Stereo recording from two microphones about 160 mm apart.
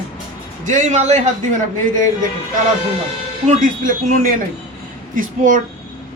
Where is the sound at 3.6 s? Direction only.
55° right (ahead or behind).